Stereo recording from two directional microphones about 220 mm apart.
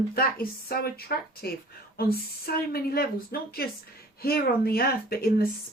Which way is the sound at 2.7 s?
45° left (ahead or behind).